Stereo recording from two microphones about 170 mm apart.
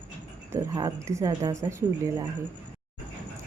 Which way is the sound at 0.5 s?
20° right (ahead or behind).